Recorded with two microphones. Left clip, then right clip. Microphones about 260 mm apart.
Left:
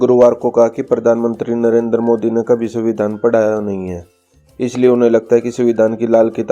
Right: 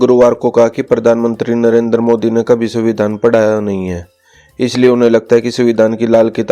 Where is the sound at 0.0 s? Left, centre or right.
Right.